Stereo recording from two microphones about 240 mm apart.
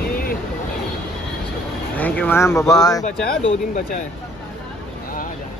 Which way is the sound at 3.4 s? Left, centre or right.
Left.